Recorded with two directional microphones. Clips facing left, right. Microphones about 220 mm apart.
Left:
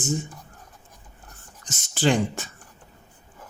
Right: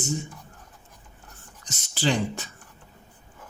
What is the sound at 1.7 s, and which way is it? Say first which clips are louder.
Speech: left 4 dB; 50° left (ahead or behind).